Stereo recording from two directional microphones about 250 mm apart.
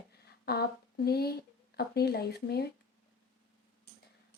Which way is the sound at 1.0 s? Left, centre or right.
Left.